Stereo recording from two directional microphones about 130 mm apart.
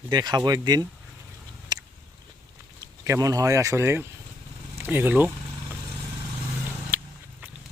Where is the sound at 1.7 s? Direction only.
30° right (ahead or behind).